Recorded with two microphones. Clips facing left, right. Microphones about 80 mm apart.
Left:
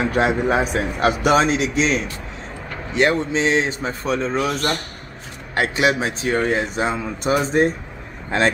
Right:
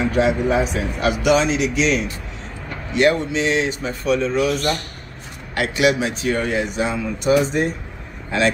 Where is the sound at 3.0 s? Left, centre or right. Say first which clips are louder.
Right 1 dB; left.